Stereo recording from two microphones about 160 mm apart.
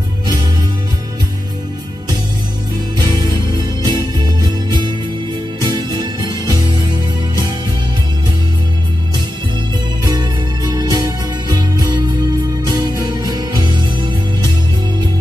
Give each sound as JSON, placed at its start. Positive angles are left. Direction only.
{"t": 3.8, "sound": "music", "side_deg": -25}
{"t": 10.0, "sound": "music", "side_deg": -25}